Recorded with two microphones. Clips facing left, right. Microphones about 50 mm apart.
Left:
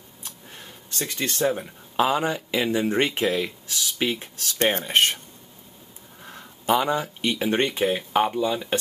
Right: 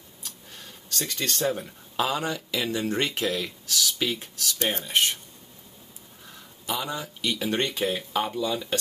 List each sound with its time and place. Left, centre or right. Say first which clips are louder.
0.2 s a sound: left 2 dB; left
1.3 s speech: left 4 dB; centre
4.4 s speech: left 6 dB; left
6.2 s speech: left 9 dB; left